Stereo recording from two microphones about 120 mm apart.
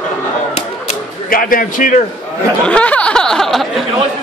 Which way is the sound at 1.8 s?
90° left.